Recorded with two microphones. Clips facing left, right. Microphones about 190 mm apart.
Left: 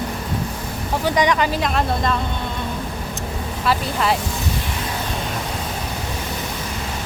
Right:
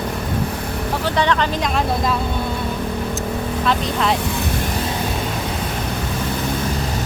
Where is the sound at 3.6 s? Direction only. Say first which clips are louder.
Even; 5° left (ahead or behind).